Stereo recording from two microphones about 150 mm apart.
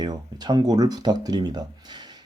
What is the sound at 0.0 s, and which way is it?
Speech, 25° right (ahead or behind).